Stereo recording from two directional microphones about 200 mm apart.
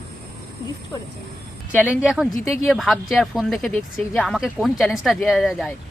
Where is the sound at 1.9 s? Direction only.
Centre (ahead or behind).